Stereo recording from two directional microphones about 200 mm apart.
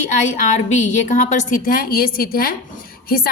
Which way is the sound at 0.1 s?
35° left (ahead or behind).